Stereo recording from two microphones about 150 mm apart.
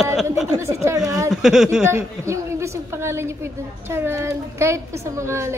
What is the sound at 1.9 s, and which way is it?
A woman's voice, 20° right (ahead or behind).